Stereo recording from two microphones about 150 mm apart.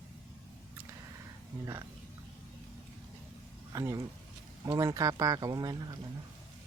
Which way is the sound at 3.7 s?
20° right (ahead or behind).